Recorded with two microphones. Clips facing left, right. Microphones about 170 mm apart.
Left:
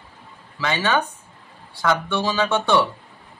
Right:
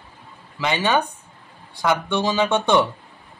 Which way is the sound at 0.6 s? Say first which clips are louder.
Right 1 dB; 15° right (ahead or behind).